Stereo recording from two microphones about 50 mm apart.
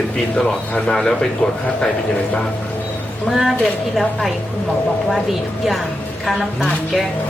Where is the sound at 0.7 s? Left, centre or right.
Centre.